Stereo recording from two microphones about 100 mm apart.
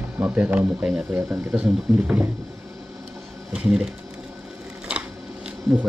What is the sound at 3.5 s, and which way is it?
Speech, 5° right (ahead or behind).